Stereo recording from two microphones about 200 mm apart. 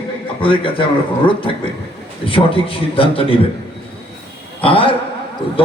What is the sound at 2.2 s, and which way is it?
A man's voice, 25° left (ahead or behind).